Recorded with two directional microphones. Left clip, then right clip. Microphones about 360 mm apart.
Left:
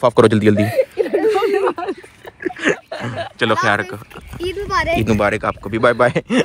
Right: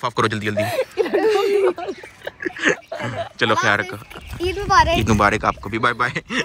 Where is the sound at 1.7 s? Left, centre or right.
Left.